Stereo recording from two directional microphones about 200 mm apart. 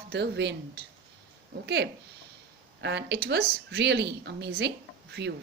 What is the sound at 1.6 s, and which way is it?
A woman's voice, 60° right (ahead or behind).